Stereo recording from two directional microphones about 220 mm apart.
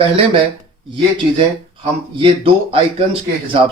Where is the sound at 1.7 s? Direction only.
25° right (ahead or behind).